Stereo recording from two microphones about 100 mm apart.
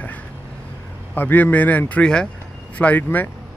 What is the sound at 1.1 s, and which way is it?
Speech, 20° left (ahead or behind).